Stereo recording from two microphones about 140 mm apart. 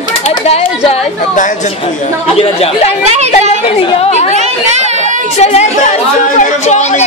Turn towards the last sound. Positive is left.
turn(degrees=55)  # may be behind; listen again after turning